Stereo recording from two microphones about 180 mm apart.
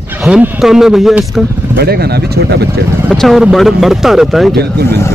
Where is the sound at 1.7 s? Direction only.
60° right (ahead or behind).